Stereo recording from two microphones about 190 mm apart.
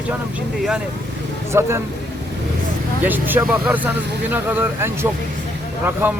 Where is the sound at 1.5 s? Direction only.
15° right (ahead or behind).